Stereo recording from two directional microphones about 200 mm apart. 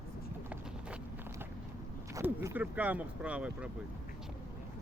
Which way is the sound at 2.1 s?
15° right (ahead or behind).